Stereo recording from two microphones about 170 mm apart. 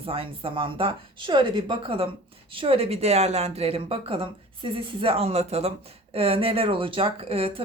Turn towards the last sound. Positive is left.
turn(degrees=-35)  # may be behind; listen again after turning